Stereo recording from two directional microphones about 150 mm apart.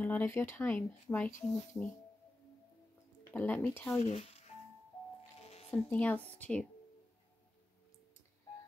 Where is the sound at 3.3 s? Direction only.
10° left (ahead or behind).